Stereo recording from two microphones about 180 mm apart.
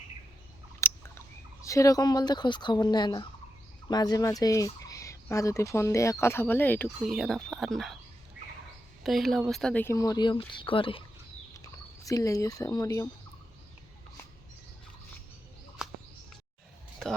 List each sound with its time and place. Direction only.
0.8 s a sound: 15° left (ahead or behind)
1.6 s speech: 15° left (ahead or behind)
3.8 s fowl: 20° left (ahead or behind)
7.0 s speech: centre (ahead or behind)
9.0 s fowl: centre (ahead or behind); by 11.0 s 30° left (ahead or behind)
12.0 s speech: 20° left (ahead or behind)